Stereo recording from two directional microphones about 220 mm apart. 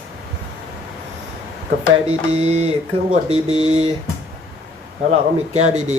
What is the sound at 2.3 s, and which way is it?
Speech, 30° right (ahead or behind).